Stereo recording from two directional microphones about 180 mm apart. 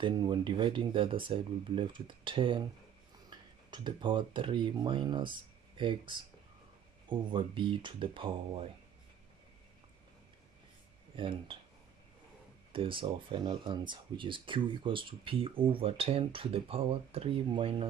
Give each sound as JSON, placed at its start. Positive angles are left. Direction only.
{"t": 0.0, "sound": "speech", "side_deg": -25}
{"t": 11.1, "sound": "speech", "side_deg": -30}
{"t": 12.7, "sound": "speech", "side_deg": -30}